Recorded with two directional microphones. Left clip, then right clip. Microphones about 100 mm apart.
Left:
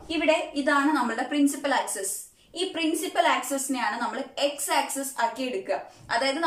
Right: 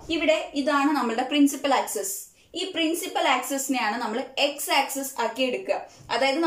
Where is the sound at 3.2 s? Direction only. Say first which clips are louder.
Right 1 dB; 20° right (ahead or behind).